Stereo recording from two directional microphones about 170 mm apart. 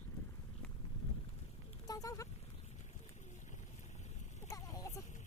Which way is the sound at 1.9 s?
20° left (ahead or behind).